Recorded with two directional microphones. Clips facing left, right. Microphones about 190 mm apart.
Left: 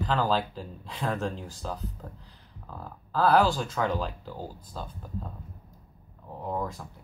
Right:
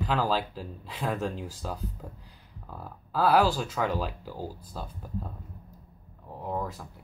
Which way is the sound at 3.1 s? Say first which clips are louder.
Left 1 dB; 5° right (ahead or behind).